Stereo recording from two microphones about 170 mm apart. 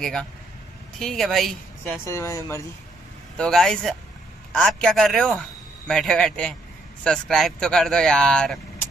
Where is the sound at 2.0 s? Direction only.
15° left (ahead or behind).